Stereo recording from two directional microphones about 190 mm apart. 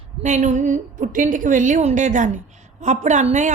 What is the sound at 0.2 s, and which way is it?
A woman's voice, 40° right (ahead or behind).